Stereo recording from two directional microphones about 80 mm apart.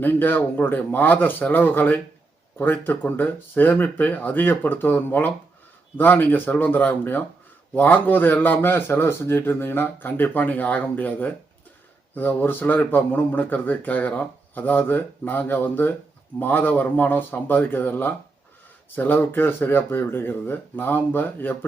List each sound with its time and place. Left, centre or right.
0.0 s speech: left